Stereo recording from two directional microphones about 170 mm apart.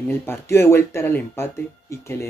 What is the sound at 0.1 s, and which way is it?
Speech, 10° left (ahead or behind).